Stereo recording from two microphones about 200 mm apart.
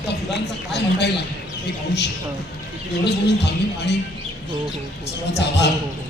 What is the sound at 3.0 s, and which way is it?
Speech, 55° left (ahead or behind).